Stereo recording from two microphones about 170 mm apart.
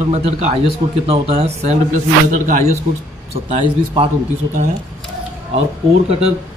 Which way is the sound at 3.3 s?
35° right (ahead or behind).